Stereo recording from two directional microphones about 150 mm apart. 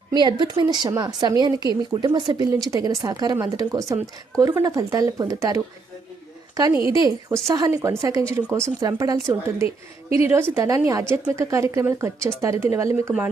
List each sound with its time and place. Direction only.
0.1 s speech: 30° right (ahead or behind)
9.6 s a woman's voice: 40° left (ahead or behind)
11.1 s speech: 20° right (ahead or behind)